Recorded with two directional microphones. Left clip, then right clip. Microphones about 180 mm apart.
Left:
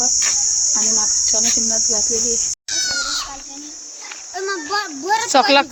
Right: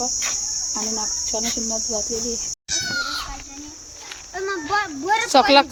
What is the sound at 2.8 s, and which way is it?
Cat, 35° right (ahead or behind).